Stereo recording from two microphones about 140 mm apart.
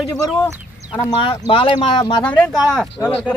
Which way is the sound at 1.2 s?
40° left (ahead or behind).